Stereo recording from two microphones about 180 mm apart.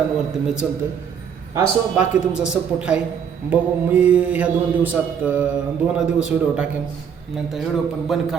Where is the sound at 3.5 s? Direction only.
5° right (ahead or behind).